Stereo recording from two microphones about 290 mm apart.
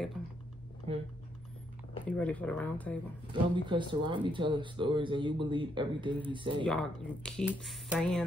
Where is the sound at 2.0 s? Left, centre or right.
Centre.